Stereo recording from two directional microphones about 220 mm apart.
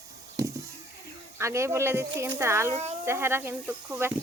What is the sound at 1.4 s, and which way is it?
Speech, 15° right (ahead or behind).